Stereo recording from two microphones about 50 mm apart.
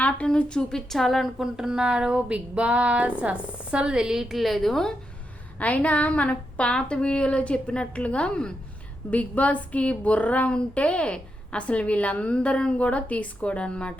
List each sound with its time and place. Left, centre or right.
0.3 s a woman's voice: centre
0.9 s a woman's voice: centre
1.5 s a sound: centre
3.2 s a woman's voice: right; by 4.9 s centre
5.5 s a woman's voice: left